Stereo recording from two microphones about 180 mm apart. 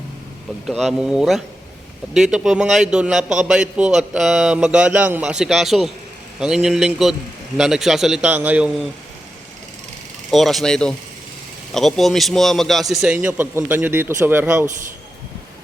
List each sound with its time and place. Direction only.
0.6 s a man's voice: centre (ahead or behind)
10.3 s a man's voice: centre (ahead or behind)